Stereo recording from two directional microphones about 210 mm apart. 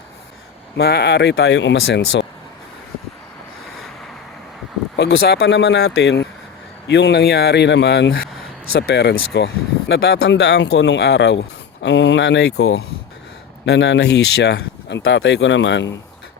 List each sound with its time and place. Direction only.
0.8 s speech: 50° left (ahead or behind)
4.9 s speech: 50° left (ahead or behind)